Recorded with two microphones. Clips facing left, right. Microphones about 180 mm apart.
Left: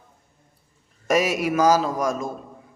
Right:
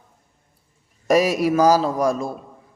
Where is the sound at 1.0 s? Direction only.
35° right (ahead or behind).